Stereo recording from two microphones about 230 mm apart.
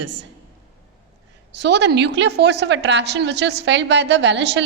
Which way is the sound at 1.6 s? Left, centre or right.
Right.